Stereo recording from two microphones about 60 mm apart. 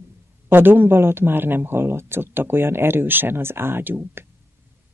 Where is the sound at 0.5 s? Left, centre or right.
Right.